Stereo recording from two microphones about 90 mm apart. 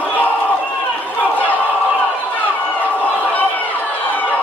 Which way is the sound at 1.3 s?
20° left (ahead or behind).